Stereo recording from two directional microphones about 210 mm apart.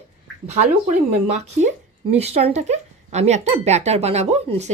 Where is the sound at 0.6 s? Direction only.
35° right (ahead or behind).